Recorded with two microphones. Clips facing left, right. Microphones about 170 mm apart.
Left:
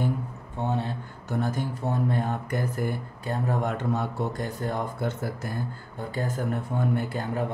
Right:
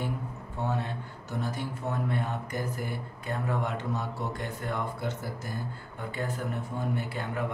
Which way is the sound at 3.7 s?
60° left (ahead or behind).